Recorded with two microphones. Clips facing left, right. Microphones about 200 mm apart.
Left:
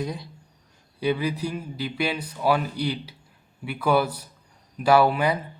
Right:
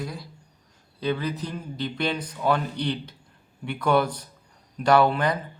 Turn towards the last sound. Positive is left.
turn(degrees=10)  # may be behind; listen again after turning